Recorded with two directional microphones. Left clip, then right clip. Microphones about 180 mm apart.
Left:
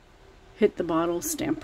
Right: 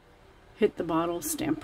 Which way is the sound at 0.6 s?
5° left (ahead or behind).